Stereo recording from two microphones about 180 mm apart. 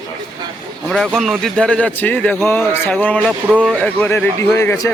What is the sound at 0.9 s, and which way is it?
A man's voice, centre (ahead or behind).